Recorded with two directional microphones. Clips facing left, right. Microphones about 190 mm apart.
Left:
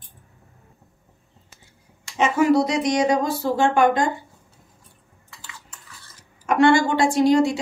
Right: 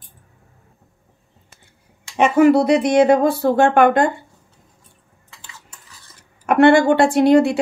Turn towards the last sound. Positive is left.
turn(degrees=-60)  # may be behind; listen again after turning